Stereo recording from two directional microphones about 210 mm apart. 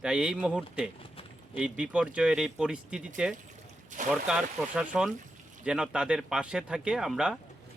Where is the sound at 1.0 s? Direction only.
25° left (ahead or behind).